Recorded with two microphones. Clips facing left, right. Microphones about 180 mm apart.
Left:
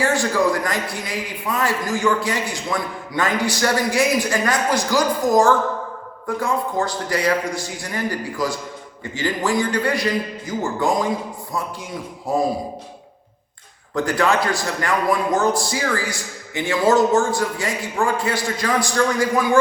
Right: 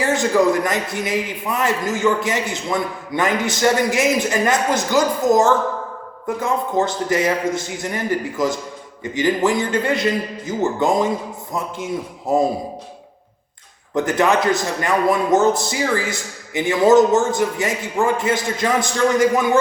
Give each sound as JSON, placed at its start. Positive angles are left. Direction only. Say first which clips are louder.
{"t": 0.0, "sound": "a man's voice", "louder": "right 2 dB", "side_deg": -20}
{"t": 12.3, "sound": "a man's voice", "louder": "right 3 dB", "side_deg": -20}
{"t": 13.9, "sound": "a man's voice", "louder": "right 2 dB", "side_deg": -20}